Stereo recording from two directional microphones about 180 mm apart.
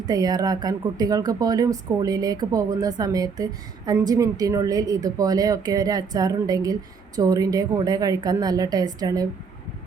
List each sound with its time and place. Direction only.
0.0 s speech: 20° right (ahead or behind)